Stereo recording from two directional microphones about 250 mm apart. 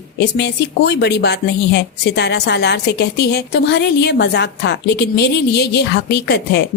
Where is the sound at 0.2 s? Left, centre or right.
Left.